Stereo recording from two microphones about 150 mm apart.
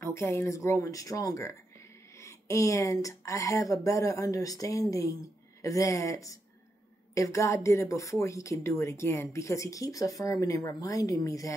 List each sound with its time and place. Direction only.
0.0 s speech: 15° left (ahead or behind)